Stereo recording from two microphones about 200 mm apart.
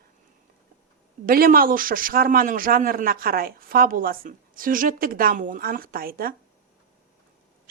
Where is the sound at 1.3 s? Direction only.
45° right (ahead or behind).